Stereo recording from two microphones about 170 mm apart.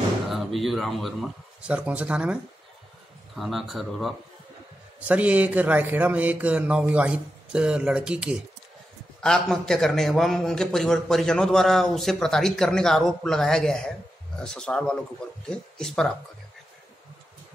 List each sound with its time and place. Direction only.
0.3 s speech: centre (ahead or behind)
3.3 s a man's voice: centre (ahead or behind)